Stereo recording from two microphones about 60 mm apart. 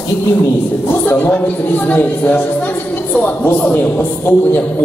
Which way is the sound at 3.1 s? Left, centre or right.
Left.